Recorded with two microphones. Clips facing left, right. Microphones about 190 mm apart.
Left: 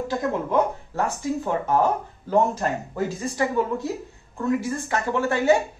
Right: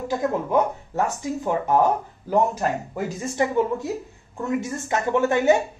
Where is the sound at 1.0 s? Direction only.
15° right (ahead or behind).